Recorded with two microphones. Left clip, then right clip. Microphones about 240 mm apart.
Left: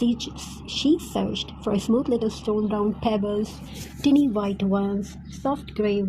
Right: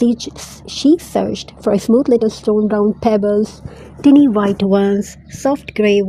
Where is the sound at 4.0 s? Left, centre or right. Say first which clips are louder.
Right 10 dB; centre.